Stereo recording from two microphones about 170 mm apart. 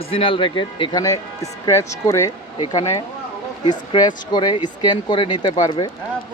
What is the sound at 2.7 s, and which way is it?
Speech, 30° left (ahead or behind).